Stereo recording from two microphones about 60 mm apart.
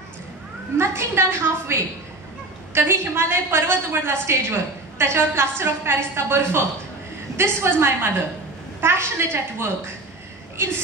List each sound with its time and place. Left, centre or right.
0.7 s a woman's voice: right